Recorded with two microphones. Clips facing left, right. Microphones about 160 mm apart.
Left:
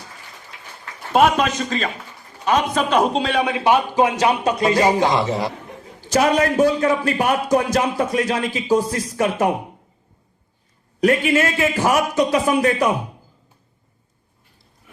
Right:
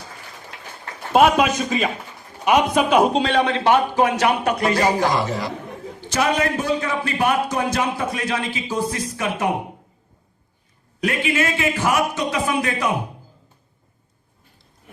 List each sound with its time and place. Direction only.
1.1 s a man's voice: 5° right (ahead or behind); by 9.5 s 40° left (ahead or behind)
11.0 s a man's voice: 40° left (ahead or behind)